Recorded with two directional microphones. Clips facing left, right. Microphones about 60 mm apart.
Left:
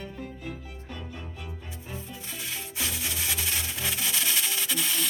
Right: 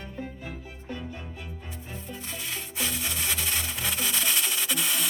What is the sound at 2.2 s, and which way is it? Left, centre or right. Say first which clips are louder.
Music: right 1 dB; centre.